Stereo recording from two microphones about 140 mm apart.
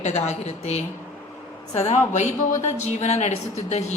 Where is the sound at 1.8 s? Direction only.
55° left (ahead or behind).